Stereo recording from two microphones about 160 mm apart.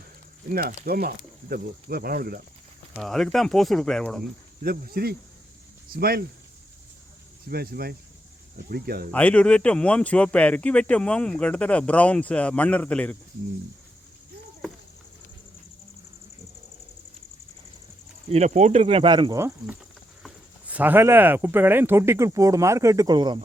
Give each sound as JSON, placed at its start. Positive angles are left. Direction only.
{"t": 0.5, "sound": "speech", "side_deg": -65}
{"t": 3.0, "sound": "speech", "side_deg": 0}
{"t": 4.6, "sound": "speech", "side_deg": -70}
{"t": 7.4, "sound": "speech", "side_deg": -75}
{"t": 9.1, "sound": "speech", "side_deg": 10}
{"t": 18.3, "sound": "speech", "side_deg": -45}
{"t": 19.4, "sound": "speech", "side_deg": -15}